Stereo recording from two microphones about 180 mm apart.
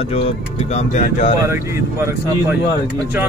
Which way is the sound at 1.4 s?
15° right (ahead or behind).